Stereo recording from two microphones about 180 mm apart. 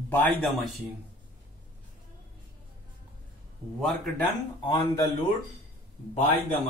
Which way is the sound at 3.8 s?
Centre (ahead or behind).